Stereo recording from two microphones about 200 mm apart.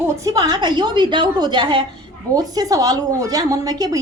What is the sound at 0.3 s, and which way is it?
A woman's voice, 20° right (ahead or behind).